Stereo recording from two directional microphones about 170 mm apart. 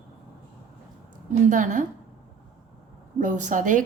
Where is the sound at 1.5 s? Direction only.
50° right (ahead or behind).